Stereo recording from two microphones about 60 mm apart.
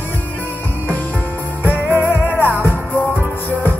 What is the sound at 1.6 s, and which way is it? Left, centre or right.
Music, left.